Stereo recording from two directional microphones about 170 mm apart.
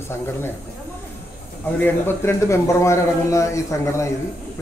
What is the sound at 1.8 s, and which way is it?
Speech, 15° left (ahead or behind).